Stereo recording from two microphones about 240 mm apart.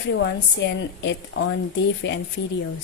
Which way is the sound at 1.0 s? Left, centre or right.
Left.